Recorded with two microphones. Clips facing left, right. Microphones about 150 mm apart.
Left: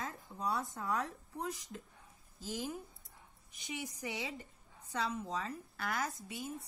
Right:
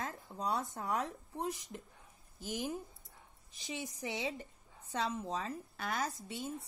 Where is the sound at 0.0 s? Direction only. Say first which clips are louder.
Right 1 dB; 20° right (ahead or behind).